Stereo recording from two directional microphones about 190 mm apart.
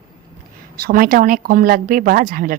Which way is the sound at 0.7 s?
50° right (ahead or behind).